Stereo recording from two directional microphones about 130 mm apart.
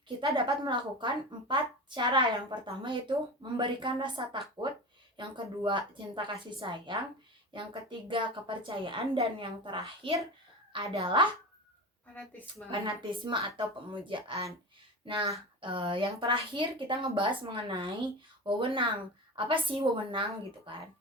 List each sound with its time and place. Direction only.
0.3 s a woman's voice: 40° right (ahead or behind)
12.7 s a woman's voice: 40° right (ahead or behind)